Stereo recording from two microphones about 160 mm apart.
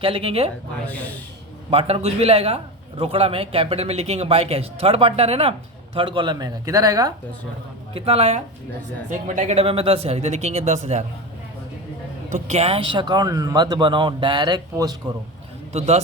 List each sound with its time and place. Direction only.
0.0 s a man's voice: 35° right (ahead or behind)
0.9 s speech: 10° left (ahead or behind)
1.7 s a man's voice: 40° right (ahead or behind); by 7.1 s 20° right (ahead or behind)
7.9 s a man's voice: 40° right (ahead or behind)
12.5 s speech: 40° right (ahead or behind)